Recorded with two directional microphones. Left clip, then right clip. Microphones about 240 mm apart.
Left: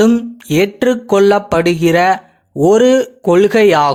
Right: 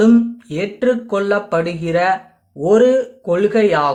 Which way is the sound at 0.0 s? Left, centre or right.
Left.